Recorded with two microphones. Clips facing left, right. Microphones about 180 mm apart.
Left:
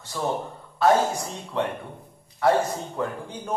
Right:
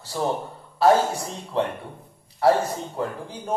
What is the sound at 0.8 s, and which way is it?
Speech, 30° right (ahead or behind).